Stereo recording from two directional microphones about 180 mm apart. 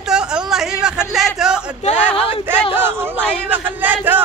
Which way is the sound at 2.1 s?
30° left (ahead or behind).